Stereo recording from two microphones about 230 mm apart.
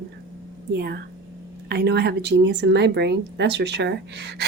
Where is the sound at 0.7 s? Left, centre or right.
Right.